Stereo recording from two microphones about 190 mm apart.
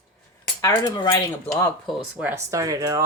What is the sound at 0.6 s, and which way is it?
Cutlery, 20° left (ahead or behind).